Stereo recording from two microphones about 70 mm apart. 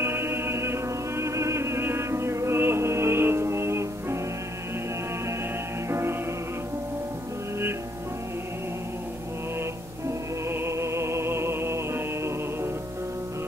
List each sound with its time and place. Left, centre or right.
0.0 s music: right
5.9 s music: right
10.5 s music: right